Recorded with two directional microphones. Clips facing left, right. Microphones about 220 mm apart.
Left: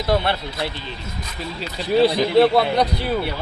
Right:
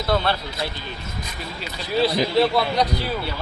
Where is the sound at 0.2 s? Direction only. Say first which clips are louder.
Left 1 dB; 20° left (ahead or behind).